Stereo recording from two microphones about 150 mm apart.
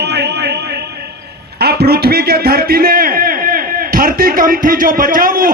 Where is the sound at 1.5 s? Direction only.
90° right.